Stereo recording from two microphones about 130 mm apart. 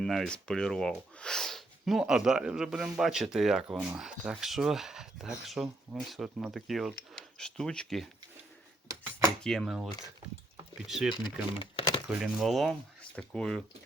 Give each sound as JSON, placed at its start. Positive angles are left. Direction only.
{"t": 0.0, "sound": "speech", "side_deg": 5}
{"t": 9.4, "sound": "speech", "side_deg": 0}
{"t": 11.6, "sound": "a sound", "side_deg": 40}
{"t": 12.0, "sound": "speech", "side_deg": 0}